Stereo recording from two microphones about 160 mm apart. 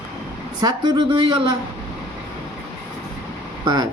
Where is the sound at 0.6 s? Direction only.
25° right (ahead or behind).